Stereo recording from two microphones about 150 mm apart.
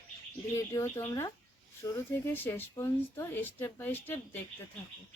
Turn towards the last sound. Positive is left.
turn(degrees=15)  # may be behind; listen again after turning